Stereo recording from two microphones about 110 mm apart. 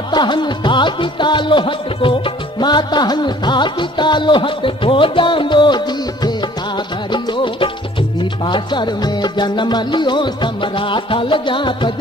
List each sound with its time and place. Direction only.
0.1 s music: 45° left (ahead or behind)
7.1 s music: 50° left (ahead or behind)